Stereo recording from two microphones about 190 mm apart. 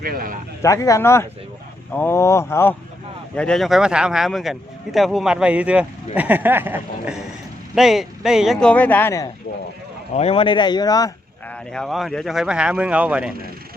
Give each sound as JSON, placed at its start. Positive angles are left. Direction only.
{"t": 0.0, "sound": "speech", "side_deg": -50}
{"t": 0.6, "sound": "speech", "side_deg": 15}
{"t": 10.2, "sound": "speech", "side_deg": 30}
{"t": 11.4, "sound": "speech", "side_deg": 5}